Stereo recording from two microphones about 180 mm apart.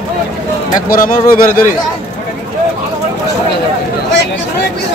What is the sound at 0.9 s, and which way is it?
Speech, 50° left (ahead or behind).